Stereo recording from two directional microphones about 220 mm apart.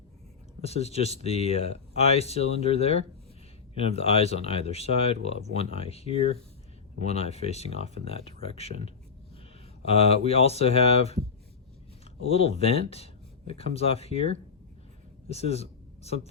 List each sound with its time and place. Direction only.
0.6 s speech: 30° left (ahead or behind)
12.3 s speech: 25° left (ahead or behind)